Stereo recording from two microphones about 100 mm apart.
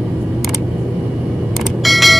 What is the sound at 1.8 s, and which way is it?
Vehicle, centre (ahead or behind).